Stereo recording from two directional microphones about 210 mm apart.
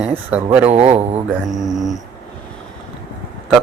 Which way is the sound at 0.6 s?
30° right (ahead or behind).